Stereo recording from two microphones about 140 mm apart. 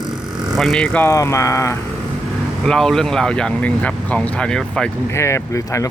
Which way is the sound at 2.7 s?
5° left (ahead or behind).